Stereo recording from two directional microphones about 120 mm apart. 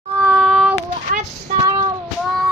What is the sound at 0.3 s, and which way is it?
Child singing, 5° right (ahead or behind).